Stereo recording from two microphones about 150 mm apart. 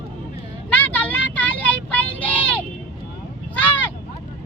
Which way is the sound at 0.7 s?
10° left (ahead or behind).